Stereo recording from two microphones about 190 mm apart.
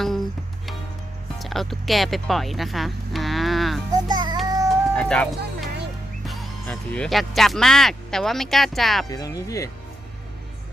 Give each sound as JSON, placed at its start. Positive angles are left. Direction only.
{"t": 0.0, "sound": "music", "side_deg": 0}
{"t": 1.4, "sound": "speech", "side_deg": 0}
{"t": 4.1, "sound": "child singing", "side_deg": -20}
{"t": 4.4, "sound": "baby cry", "side_deg": -20}
{"t": 4.9, "sound": "speech", "side_deg": 5}
{"t": 9.0, "sound": "speech", "side_deg": 20}